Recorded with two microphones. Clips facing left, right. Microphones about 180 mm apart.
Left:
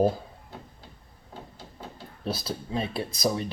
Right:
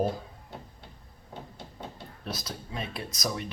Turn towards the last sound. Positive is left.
turn(degrees=30)  # may be behind; listen again after turning